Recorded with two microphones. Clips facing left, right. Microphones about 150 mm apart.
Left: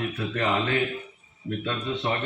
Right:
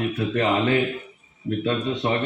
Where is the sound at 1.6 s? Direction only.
20° right (ahead or behind).